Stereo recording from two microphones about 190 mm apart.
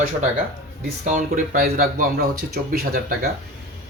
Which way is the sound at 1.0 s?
40° right (ahead or behind).